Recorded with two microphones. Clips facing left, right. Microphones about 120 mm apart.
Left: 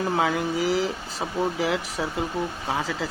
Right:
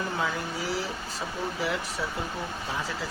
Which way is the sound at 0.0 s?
90° left.